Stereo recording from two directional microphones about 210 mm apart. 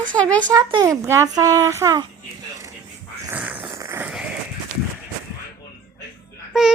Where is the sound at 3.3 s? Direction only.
10° right (ahead or behind).